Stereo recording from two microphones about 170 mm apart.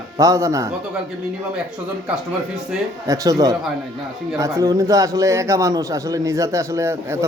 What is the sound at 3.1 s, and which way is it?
A man's voice, 20° right (ahead or behind).